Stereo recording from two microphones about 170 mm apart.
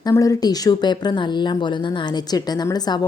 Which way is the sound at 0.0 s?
20° left (ahead or behind).